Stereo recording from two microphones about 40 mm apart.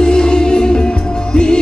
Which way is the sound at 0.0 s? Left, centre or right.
Centre.